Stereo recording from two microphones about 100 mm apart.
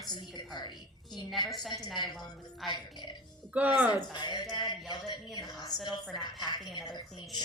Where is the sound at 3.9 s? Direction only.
45° left (ahead or behind).